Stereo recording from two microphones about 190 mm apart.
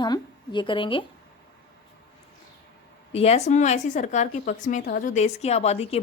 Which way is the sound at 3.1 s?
35° left (ahead or behind).